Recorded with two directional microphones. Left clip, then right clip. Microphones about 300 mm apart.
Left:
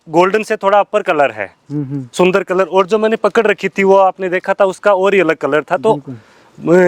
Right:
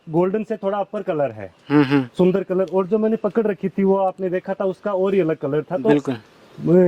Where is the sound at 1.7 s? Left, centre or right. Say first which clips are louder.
Right 11 dB; centre.